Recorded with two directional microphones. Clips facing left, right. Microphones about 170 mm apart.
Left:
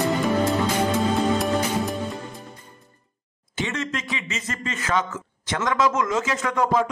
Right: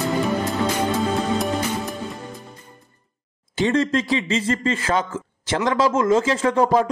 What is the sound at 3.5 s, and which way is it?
A man's voice, 35° right (ahead or behind).